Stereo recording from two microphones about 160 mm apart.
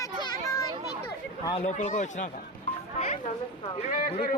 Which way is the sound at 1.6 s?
45° left (ahead or behind).